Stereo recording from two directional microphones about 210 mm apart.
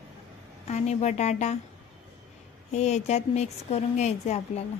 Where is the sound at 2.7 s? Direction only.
30° left (ahead or behind).